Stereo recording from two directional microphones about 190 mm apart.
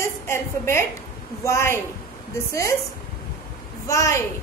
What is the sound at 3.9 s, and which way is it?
Speech, 15° left (ahead or behind).